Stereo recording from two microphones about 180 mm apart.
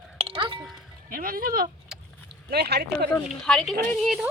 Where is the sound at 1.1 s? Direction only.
50° right (ahead or behind).